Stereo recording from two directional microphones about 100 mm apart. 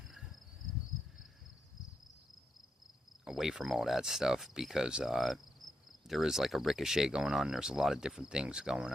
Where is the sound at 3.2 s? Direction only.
5° right (ahead or behind).